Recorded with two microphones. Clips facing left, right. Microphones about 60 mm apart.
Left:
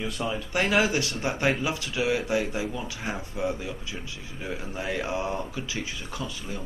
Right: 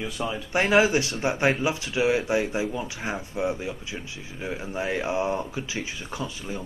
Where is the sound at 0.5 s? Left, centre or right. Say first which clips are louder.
Right 4 dB; right.